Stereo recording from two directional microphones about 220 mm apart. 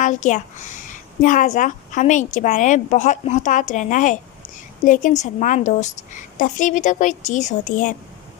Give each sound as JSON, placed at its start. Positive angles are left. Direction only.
{"t": 0.0, "sound": "a woman's voice", "side_deg": 35}